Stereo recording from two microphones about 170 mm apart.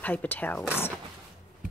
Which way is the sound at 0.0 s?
10° left (ahead or behind).